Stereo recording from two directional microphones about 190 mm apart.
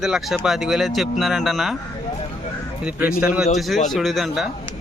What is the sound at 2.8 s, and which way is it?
Speech, 5° right (ahead or behind).